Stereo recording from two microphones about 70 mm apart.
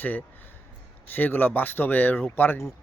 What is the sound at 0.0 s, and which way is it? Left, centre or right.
Speech, left.